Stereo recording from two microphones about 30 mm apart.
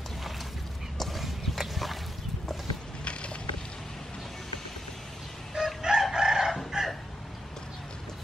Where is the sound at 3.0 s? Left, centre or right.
Left.